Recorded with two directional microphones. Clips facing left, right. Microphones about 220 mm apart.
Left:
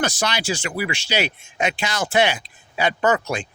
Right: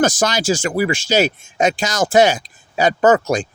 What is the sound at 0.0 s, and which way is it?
Speech, 45° right (ahead or behind).